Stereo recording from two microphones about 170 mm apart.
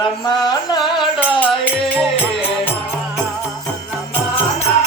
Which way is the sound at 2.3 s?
35° left (ahead or behind).